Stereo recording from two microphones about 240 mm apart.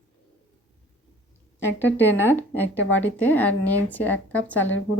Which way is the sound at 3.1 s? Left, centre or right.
Centre.